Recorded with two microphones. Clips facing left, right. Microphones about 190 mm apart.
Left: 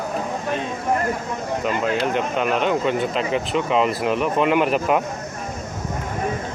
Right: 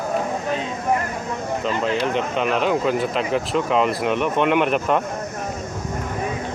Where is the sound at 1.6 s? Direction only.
5° left (ahead or behind).